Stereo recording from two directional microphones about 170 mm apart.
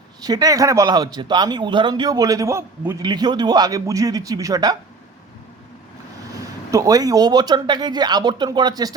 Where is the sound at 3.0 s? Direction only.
25° right (ahead or behind).